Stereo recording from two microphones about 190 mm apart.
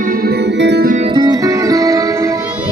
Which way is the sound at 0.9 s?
35° right (ahead or behind).